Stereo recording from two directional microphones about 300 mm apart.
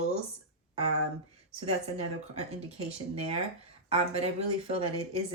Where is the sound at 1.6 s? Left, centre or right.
Right.